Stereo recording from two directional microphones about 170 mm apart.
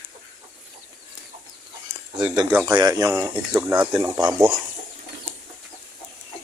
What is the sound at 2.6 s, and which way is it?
Speech, 25° right (ahead or behind).